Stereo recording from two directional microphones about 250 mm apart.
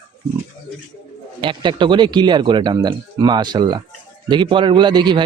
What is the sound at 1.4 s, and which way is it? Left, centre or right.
A man's voice, centre.